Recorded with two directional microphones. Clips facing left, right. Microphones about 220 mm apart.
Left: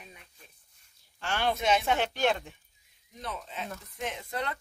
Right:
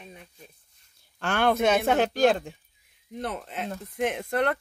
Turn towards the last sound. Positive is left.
turn(degrees=-60)  # may be behind; listen again after turning